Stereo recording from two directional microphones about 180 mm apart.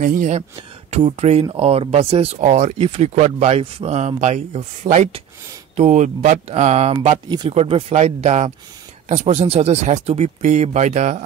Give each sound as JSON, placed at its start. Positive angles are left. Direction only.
{"t": 0.0, "sound": "speech", "side_deg": -45}
{"t": 0.8, "sound": "speech", "side_deg": -35}